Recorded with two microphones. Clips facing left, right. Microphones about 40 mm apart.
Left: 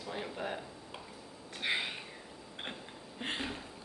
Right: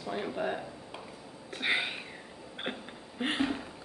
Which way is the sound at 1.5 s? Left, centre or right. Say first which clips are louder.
Right 4 dB; right.